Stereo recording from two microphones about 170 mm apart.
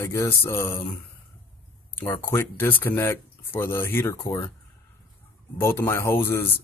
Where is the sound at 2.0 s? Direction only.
15° left (ahead or behind).